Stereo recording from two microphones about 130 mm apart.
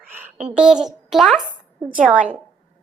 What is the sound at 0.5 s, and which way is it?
A child's voice, 5° right (ahead or behind).